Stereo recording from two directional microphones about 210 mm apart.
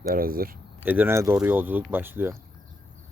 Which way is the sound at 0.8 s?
10° right (ahead or behind).